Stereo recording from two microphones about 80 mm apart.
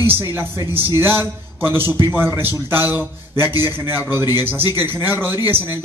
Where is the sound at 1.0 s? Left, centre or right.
Right.